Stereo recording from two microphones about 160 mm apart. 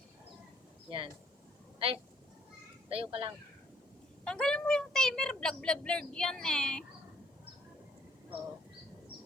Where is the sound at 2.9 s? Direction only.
35° right (ahead or behind).